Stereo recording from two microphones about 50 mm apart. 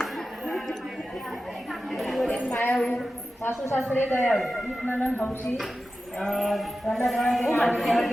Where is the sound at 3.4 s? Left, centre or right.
Left.